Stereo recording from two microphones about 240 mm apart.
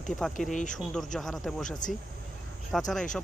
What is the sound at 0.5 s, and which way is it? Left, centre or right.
Speech, left.